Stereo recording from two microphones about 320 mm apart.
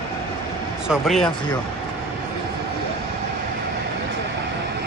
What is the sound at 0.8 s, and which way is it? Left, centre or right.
Speech, centre.